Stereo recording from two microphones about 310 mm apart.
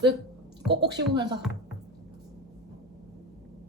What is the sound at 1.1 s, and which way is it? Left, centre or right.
Speech, centre.